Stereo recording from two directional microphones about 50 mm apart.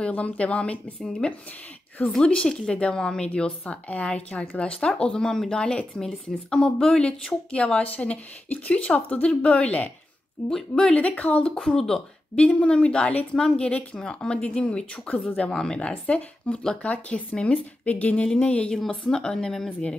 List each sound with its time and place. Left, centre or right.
0.0 s speech: left
10.5 s speech: centre
11.0 s speech: left
11.6 s speech: centre
12.4 s speech: left
13.1 s speech: left
13.4 s speech: centre